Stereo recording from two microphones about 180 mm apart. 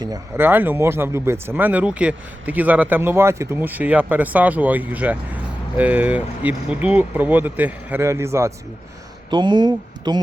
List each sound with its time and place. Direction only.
0.0 s speech: 15° right (ahead or behind)